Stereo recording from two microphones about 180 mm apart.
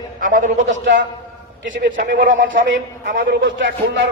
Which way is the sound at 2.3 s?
90° right.